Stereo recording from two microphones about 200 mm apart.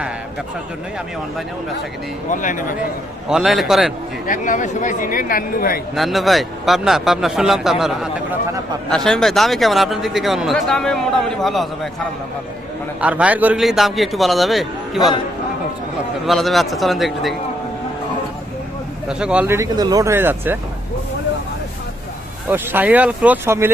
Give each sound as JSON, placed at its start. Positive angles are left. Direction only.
{"t": 2.3, "sound": "speech", "side_deg": 40}
{"t": 3.2, "sound": "speech", "side_deg": 0}
{"t": 4.3, "sound": "speech", "side_deg": 40}
{"t": 5.9, "sound": "speech", "side_deg": 0}
{"t": 13.0, "sound": "speech", "side_deg": -5}
{"t": 14.9, "sound": "speech", "side_deg": 20}
{"t": 16.2, "sound": "speech", "side_deg": 0}
{"t": 19.0, "sound": "speech", "side_deg": -5}
{"t": 22.4, "sound": "speech", "side_deg": -10}